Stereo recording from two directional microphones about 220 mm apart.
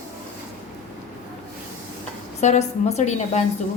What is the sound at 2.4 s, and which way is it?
A woman's voice, 30° left (ahead or behind).